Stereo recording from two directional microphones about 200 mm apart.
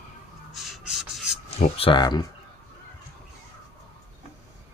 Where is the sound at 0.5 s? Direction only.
Centre (ahead or behind).